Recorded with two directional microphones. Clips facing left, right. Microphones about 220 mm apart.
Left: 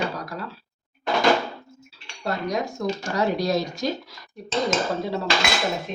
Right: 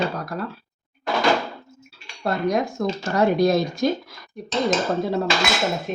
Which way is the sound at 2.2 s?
55° right (ahead or behind).